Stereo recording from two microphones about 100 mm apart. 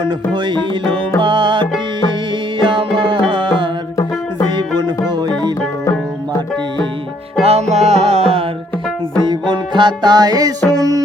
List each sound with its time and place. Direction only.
0.0 s music: 50° right (ahead or behind)
7.4 s music: 90° right
9.2 s music: 50° right (ahead or behind)